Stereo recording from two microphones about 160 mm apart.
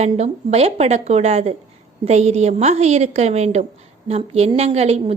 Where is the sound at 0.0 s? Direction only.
40° right (ahead or behind).